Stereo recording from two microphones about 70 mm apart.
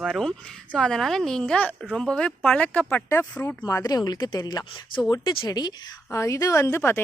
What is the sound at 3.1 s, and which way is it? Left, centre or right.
Speech, left.